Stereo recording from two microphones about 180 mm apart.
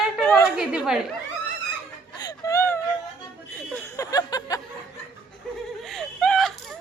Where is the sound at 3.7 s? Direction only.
20° left (ahead or behind).